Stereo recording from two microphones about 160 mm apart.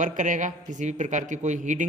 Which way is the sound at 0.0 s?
50° right (ahead or behind).